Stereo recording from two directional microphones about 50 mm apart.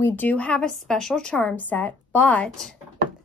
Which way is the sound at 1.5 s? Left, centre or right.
Left.